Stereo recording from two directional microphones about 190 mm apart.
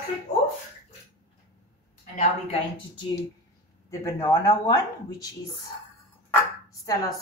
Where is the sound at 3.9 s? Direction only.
15° left (ahead or behind).